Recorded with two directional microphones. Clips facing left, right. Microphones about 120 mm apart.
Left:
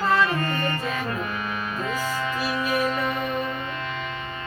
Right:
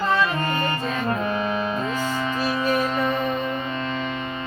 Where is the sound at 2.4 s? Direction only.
35° right (ahead or behind).